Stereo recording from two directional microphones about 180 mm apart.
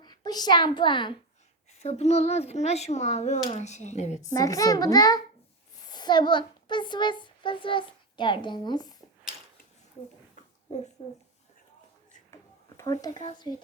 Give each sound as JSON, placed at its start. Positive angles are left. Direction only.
{"t": 0.0, "sound": "a woman's voice", "side_deg": 25}
{"t": 1.8, "sound": "a child's voice", "side_deg": 35}
{"t": 4.4, "sound": "a child's voice", "side_deg": 20}
{"t": 12.3, "sound": "a sound", "side_deg": 15}